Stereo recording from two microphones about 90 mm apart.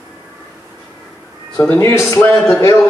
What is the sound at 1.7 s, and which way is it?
Speech, 25° left (ahead or behind).